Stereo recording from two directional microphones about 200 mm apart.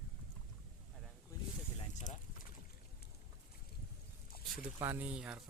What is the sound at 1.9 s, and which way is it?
Speech, 35° left (ahead or behind).